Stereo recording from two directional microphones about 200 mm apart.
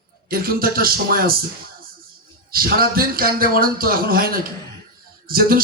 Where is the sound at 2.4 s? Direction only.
50° right (ahead or behind).